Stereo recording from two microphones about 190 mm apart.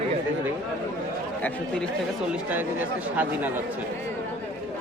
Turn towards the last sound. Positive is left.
turn(degrees=-10)  # may be behind; listen again after turning